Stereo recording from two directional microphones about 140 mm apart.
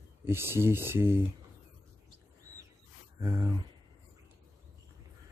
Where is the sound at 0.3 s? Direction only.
15° right (ahead or behind).